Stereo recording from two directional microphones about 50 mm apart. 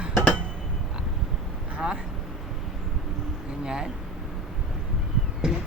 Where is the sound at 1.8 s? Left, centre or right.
Right.